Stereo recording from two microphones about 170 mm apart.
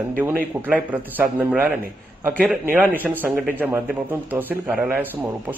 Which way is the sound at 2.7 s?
10° right (ahead or behind).